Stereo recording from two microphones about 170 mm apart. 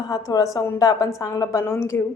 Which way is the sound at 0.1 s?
20° left (ahead or behind).